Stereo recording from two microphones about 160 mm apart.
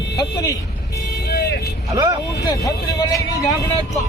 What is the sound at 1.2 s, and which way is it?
Vehicle, 90° left.